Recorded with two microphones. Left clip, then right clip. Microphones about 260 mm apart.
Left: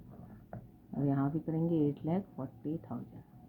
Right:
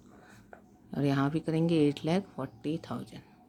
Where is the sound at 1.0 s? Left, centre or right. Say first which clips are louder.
Right 4 dB; right.